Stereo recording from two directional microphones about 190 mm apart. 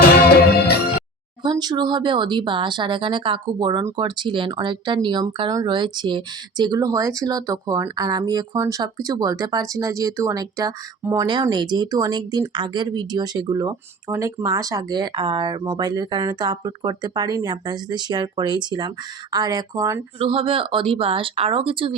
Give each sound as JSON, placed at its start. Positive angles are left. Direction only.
{"t": 1.4, "sound": "speech", "side_deg": -25}
{"t": 20.1, "sound": "speech", "side_deg": -30}